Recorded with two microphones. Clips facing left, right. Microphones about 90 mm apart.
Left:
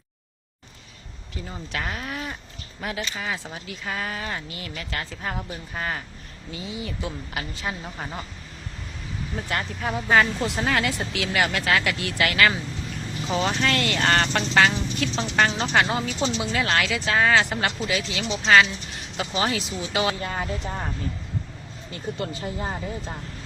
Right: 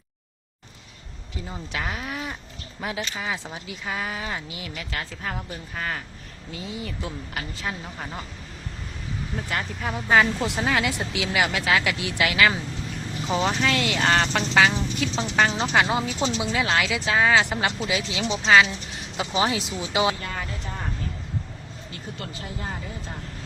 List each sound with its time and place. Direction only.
1.5 s a woman's voice: 5° right (ahead or behind)
9.5 s a woman's voice: centre (ahead or behind)
17.7 s a woman's voice: 15° right (ahead or behind)
18.4 s speech: 5° right (ahead or behind)
19.1 s a woman's voice: 15° right (ahead or behind)
20.2 s speech: 30° left (ahead or behind)
22.2 s speech: 25° left (ahead or behind)